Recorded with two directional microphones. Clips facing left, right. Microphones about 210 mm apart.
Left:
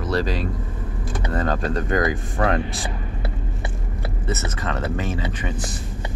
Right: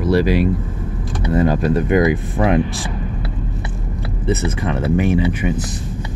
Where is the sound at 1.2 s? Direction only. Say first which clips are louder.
Right 8 dB; 10° right (ahead or behind).